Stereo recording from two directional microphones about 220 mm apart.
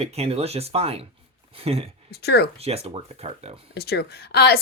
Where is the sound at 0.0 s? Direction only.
25° right (ahead or behind).